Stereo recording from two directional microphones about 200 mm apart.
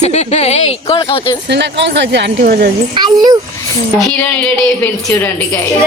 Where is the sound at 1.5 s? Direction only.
60° right (ahead or behind).